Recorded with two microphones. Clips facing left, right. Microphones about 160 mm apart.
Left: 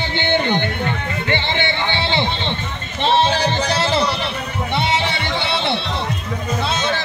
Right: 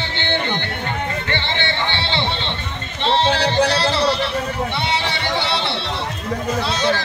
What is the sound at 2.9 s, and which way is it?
Music, 15° left (ahead or behind).